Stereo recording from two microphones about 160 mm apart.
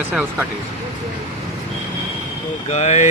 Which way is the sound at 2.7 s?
50° left (ahead or behind).